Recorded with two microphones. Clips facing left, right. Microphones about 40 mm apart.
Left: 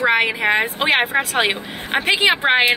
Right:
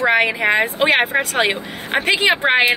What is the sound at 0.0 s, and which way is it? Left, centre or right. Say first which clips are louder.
A woman's voice: right 1 dB; centre.